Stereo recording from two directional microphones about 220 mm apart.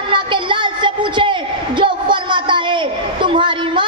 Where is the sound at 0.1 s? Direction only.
20° right (ahead or behind).